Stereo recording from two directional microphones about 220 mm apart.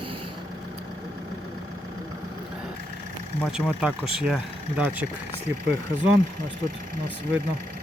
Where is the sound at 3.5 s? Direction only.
5° right (ahead or behind).